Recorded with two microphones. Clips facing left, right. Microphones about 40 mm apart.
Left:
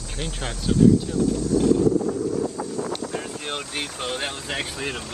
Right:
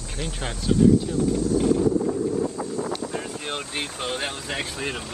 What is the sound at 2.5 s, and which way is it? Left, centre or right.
Wind noise, right.